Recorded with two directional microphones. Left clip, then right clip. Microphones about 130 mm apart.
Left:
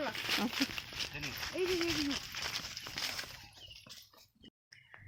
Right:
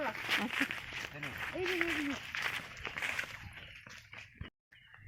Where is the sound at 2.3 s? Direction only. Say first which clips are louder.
Right 3 dB; 75° left (ahead or behind).